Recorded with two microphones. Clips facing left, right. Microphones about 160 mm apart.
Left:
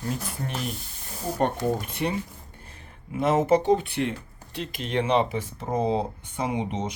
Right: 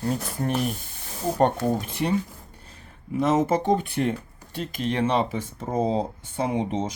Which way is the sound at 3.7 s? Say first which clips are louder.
Even; 45° right (ahead or behind).